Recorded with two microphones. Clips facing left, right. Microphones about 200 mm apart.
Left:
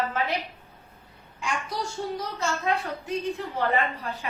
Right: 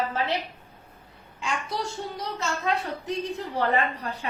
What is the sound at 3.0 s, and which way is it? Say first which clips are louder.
A woman's voice: left 1 dB; 35° right (ahead or behind).